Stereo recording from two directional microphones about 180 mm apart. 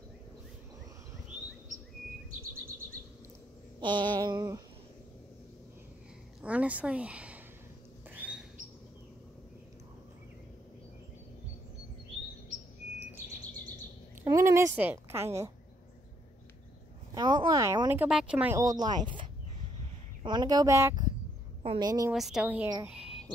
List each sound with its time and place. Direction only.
3.8 s speech: 25° right (ahead or behind)
6.4 s speech: 10° right (ahead or behind)
8.1 s bird: 5° right (ahead or behind)
14.2 s a sound: 15° right (ahead or behind)
17.1 s speech: 25° right (ahead or behind); by 18.6 s 5° right (ahead or behind)
18.6 s speech: 20° right (ahead or behind)
20.2 s speech: 20° right (ahead or behind)
22.1 s speech: centre (ahead or behind)
22.8 s a sound: 5° right (ahead or behind)